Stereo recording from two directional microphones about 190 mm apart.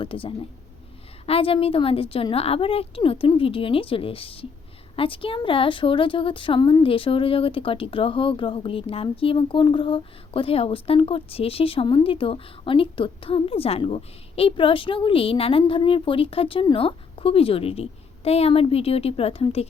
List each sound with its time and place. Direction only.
0.0 s a woman's voice: 30° left (ahead or behind)